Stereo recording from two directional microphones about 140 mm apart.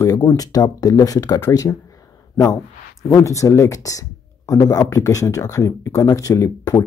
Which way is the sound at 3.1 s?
20° left (ahead or behind).